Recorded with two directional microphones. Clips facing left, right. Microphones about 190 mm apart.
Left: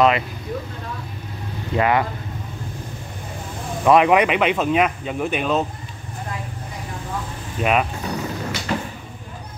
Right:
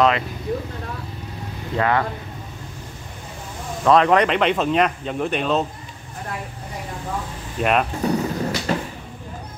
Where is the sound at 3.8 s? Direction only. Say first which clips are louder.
Left 1 dB; 10° left (ahead or behind).